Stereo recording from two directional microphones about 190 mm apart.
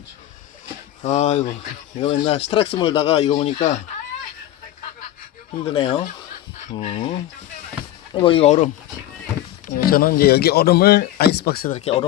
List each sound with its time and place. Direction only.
1.0 s speech: 35° left (ahead or behind)
5.6 s speech: 30° left (ahead or behind)
9.7 s speech: 50° left (ahead or behind)
11.7 s speech: 30° left (ahead or behind)